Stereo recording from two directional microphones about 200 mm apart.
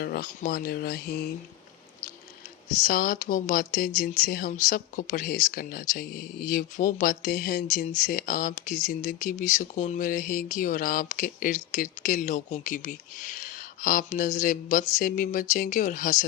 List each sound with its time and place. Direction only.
0.0 s speech: 45° left (ahead or behind)
2.8 s speech: 45° left (ahead or behind)